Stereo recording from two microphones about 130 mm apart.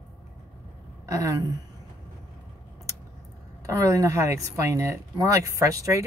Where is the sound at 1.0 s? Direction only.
25° right (ahead or behind).